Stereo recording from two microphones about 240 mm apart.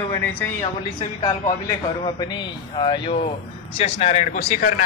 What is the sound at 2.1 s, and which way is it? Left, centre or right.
A man's voice, centre.